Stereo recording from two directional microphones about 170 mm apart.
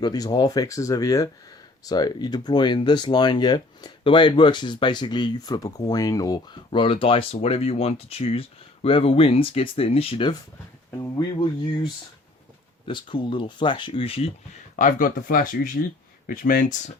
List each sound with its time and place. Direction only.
0.0 s speech: 25° left (ahead or behind)
12.9 s speech: 30° left (ahead or behind)
14.8 s speech: 50° left (ahead or behind)